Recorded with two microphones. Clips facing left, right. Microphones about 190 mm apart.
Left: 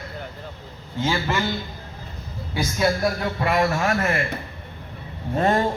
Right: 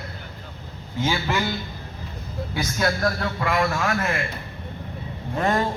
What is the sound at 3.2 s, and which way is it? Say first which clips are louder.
Speech: left 2 dB; 30° left (ahead or behind).